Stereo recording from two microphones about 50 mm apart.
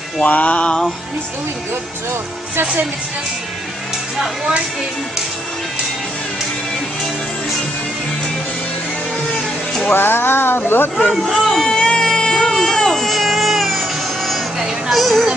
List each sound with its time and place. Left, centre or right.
0.2 s a sound: left
9.9 s speech: left
11.2 s a sound: centre
11.7 s music: centre
12.1 s baby cry: centre
14.6 s music: centre